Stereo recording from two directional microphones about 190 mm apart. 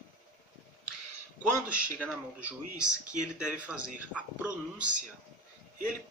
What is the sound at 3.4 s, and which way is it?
A man's voice, 5° right (ahead or behind).